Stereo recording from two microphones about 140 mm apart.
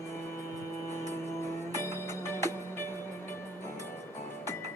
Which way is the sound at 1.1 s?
20° left (ahead or behind).